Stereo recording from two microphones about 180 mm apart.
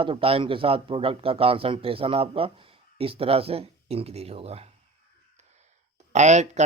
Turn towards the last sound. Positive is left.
turn(degrees=-40)  # may be behind; listen again after turning